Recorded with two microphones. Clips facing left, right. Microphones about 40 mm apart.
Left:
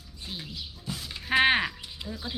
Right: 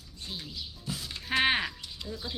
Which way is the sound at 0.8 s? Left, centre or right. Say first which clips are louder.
Left 3 dB; centre.